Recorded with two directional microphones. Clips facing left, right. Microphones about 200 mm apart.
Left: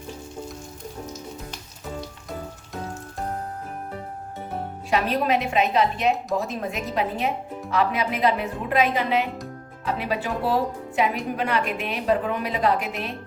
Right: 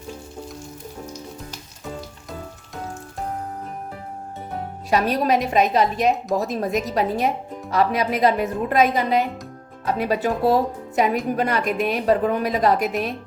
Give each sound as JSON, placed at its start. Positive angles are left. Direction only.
{"t": 4.9, "sound": "a woman's voice", "side_deg": -40}